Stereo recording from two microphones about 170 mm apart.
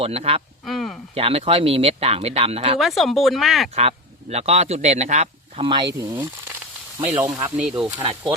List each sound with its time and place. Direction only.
0.0 s speech: 35° right (ahead or behind)
0.6 s speech: centre (ahead or behind)
1.1 s speech: 35° right (ahead or behind)
2.7 s speech: centre (ahead or behind)
3.8 s a man's voice: 40° right (ahead or behind)
6.0 s speech: 15° right (ahead or behind)